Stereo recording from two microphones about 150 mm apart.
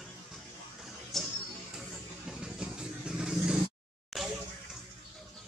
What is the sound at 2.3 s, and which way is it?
Vehicle, 5° right (ahead or behind).